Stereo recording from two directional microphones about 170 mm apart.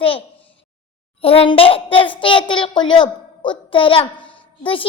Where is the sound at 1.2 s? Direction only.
35° left (ahead or behind).